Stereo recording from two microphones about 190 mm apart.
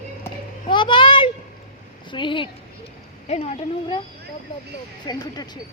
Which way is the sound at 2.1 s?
25° left (ahead or behind).